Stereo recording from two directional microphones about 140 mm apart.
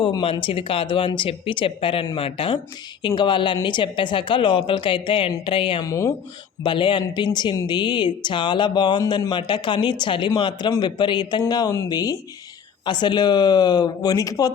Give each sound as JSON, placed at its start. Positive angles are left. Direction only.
{"t": 0.0, "sound": "speech", "side_deg": 40}
{"t": 5.8, "sound": "speech", "side_deg": 20}
{"t": 6.6, "sound": "speech", "side_deg": 35}